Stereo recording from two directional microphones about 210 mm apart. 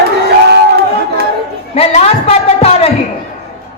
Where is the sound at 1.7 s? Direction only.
30° left (ahead or behind).